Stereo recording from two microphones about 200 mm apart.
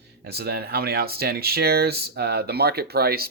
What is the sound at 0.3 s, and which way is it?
Speech, 55° right (ahead or behind).